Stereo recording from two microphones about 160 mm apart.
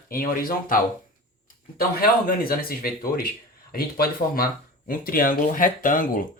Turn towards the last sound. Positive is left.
turn(degrees=60)  # may be behind; listen again after turning